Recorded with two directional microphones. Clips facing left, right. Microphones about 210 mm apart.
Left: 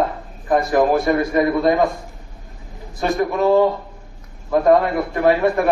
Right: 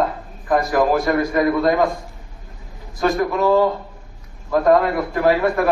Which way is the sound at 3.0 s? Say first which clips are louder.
Even; 20° left (ahead or behind).